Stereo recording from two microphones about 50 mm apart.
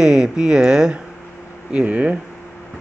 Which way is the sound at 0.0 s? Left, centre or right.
Centre.